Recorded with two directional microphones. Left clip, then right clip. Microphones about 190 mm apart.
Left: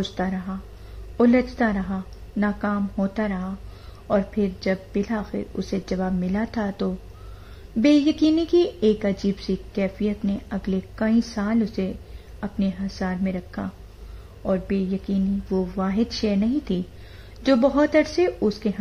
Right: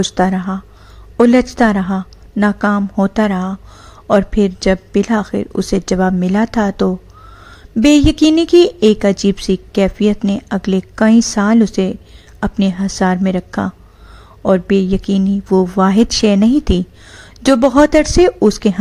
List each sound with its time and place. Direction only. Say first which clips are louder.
0.0 s speech: right 13 dB; 35° right (ahead or behind)